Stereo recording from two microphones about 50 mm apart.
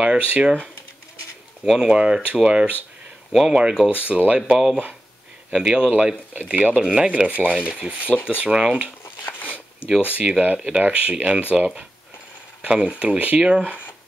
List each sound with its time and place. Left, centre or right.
0.0 s speech: right
1.6 s speech: centre
3.3 s speech: centre; by 7.6 s right
8.0 s speech: left
8.4 s speech: centre
9.2 s a sound: left
10.0 s speech: right